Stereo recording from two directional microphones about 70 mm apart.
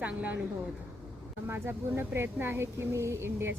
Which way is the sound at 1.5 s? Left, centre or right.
Right.